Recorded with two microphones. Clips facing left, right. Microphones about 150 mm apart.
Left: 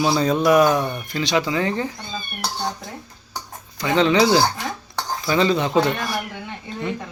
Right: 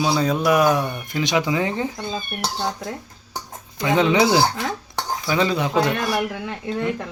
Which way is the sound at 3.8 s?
20° right (ahead or behind).